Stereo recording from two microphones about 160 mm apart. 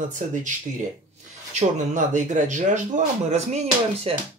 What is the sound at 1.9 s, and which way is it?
A man's voice, 50° right (ahead or behind).